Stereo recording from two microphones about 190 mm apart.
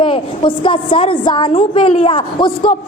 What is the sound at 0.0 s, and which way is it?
A woman's voice, 25° left (ahead or behind).